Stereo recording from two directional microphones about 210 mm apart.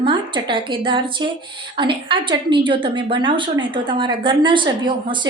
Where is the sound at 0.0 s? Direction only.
20° right (ahead or behind).